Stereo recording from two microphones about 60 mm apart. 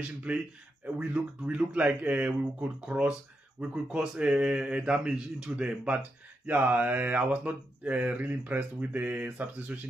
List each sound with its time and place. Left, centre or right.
0.3 s speech: right
6.4 s speech: right